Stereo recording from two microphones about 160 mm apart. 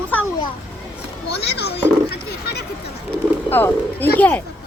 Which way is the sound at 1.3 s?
90° left.